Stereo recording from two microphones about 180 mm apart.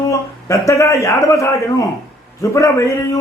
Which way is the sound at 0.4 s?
15° left (ahead or behind).